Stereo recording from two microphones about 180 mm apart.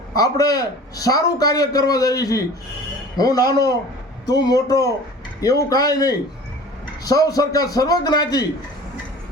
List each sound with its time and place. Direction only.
0.1 s a man's voice: 20° left (ahead or behind)